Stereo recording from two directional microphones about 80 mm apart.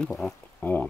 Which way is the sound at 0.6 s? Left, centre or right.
Left.